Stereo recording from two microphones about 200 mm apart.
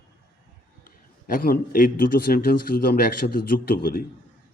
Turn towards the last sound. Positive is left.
turn(degrees=50)  # may be behind; listen again after turning